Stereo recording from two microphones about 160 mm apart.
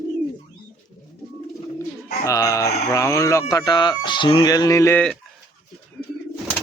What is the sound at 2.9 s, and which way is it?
Speech, 20° left (ahead or behind).